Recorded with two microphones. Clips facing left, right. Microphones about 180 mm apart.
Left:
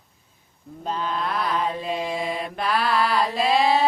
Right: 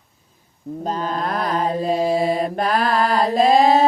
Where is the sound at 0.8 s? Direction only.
40° right (ahead or behind).